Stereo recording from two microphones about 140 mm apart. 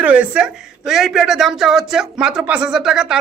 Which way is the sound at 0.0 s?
10° right (ahead or behind).